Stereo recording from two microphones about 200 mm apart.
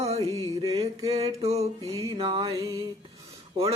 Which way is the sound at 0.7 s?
30° right (ahead or behind).